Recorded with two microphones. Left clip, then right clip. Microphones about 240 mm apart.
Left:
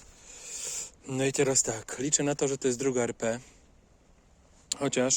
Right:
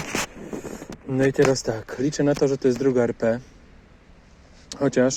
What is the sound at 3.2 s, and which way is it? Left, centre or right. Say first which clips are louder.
Speech: right 8 dB; left.